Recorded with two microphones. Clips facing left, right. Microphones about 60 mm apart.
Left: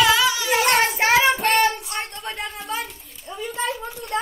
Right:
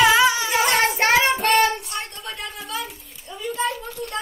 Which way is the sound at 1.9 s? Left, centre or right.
Left.